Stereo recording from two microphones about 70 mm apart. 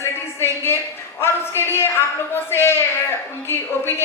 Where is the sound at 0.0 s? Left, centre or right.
Left.